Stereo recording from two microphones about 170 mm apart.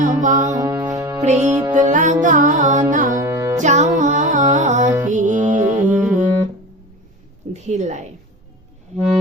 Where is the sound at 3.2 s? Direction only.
15° right (ahead or behind).